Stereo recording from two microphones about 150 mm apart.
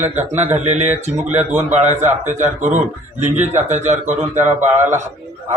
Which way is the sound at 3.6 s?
50° right (ahead or behind).